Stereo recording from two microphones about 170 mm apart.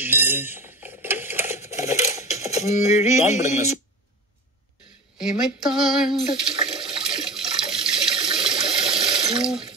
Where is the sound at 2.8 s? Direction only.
40° left (ahead or behind).